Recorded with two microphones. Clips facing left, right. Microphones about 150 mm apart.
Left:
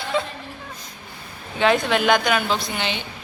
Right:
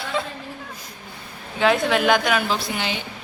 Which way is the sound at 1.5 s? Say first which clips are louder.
Even; centre (ahead or behind).